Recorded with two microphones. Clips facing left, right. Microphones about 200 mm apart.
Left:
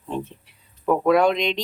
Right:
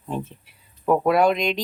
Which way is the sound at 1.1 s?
5° right (ahead or behind).